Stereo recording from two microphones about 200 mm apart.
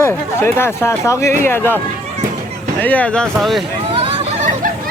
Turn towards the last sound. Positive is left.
turn(degrees=-30)  # may be behind; listen again after turning